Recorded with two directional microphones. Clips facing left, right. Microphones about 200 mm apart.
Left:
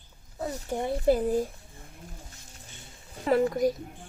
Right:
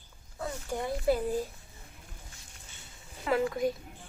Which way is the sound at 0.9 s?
35° left (ahead or behind).